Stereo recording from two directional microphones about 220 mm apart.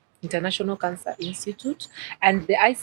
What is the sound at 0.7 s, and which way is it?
Speech, 20° right (ahead or behind).